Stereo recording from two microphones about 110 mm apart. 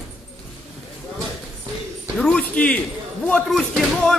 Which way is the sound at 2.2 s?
5° left (ahead or behind).